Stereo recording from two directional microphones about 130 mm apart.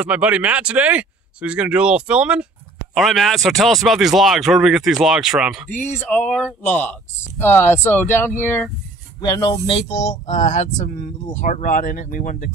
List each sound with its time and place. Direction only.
0.0 s speech: 10° right (ahead or behind)
5.9 s speech: 10° left (ahead or behind)
9.2 s speech: 30° left (ahead or behind); by 10.9 s 65° left (ahead or behind)
11.3 s speech: 80° left